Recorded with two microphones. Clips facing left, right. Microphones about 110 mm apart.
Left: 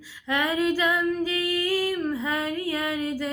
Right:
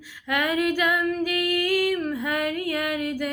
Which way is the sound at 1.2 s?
25° left (ahead or behind).